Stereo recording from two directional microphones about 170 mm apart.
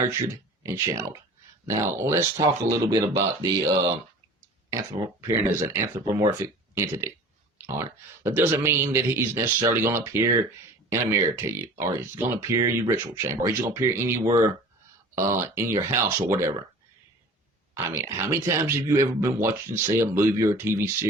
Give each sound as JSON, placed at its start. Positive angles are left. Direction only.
{"t": 0.6, "sound": "speech", "side_deg": -15}
{"t": 17.7, "sound": "speech", "side_deg": -15}